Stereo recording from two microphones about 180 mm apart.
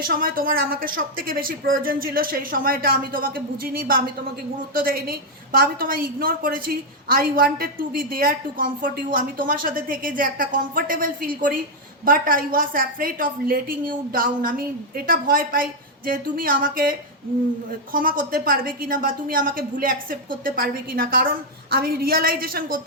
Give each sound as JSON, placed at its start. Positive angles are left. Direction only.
{"t": 0.0, "sound": "a woman's voice", "side_deg": -55}
{"t": 17.9, "sound": "a woman's voice", "side_deg": -50}